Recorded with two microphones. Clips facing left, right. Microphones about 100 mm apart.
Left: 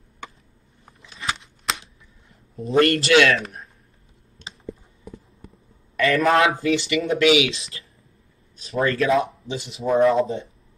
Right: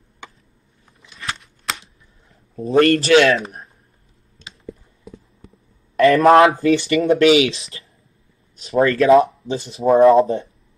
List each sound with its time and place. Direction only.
2.5 s a man's voice: 35° right (ahead or behind)
5.9 s a man's voice: 35° right (ahead or behind)
8.6 s speech: 35° right (ahead or behind)